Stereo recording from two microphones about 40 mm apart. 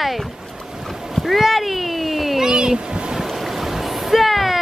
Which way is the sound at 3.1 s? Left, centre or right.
Centre.